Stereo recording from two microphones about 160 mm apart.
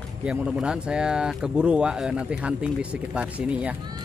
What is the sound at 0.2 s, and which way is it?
Speech, 5° right (ahead or behind).